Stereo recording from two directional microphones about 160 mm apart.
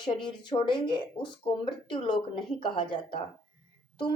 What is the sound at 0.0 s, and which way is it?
Speech, 30° left (ahead or behind).